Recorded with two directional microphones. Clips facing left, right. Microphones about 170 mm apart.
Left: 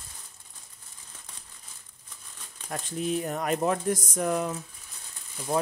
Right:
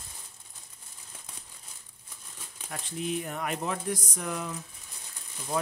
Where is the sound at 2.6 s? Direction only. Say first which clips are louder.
Left 4 dB; 40° left (ahead or behind).